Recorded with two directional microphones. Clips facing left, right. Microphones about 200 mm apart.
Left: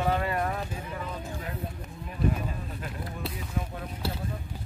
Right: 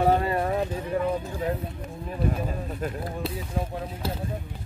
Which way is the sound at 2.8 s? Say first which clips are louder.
Right 12 dB; 45° right (ahead or behind).